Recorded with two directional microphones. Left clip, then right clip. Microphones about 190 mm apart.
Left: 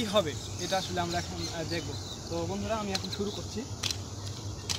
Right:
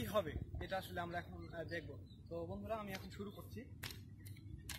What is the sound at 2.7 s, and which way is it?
Speech, 15° right (ahead or behind).